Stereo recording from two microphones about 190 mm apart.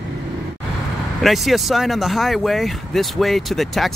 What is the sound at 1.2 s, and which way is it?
Speech, centre (ahead or behind).